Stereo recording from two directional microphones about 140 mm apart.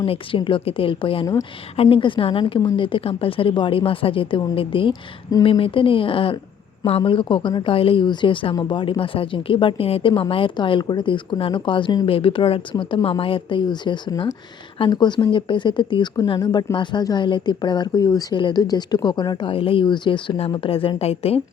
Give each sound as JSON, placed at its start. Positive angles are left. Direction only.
{"t": 0.0, "sound": "a woman's voice", "side_deg": 40}